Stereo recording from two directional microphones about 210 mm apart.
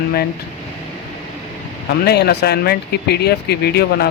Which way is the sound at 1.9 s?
50° left (ahead or behind).